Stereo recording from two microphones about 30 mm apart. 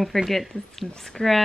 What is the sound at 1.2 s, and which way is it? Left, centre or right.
Speech, centre.